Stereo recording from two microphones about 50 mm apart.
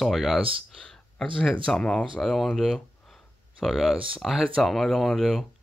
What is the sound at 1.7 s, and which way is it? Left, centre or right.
Speech, centre.